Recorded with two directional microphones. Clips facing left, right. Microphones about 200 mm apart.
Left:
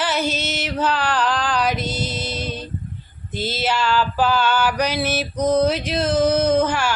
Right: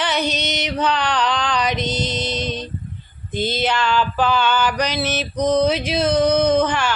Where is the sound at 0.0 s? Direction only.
5° left (ahead or behind).